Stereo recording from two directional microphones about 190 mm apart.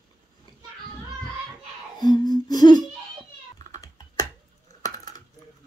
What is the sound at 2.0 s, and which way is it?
Humming, 20° left (ahead or behind).